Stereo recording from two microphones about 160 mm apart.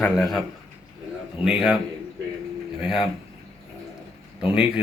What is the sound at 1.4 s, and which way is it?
Speech, 5° right (ahead or behind).